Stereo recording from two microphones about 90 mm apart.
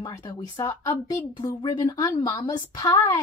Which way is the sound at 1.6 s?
55° left (ahead or behind).